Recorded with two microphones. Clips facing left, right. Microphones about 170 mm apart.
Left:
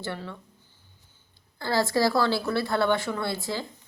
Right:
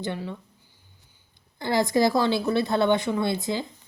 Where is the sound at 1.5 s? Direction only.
20° right (ahead or behind).